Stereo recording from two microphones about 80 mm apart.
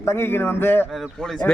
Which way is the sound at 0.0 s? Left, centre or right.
Left.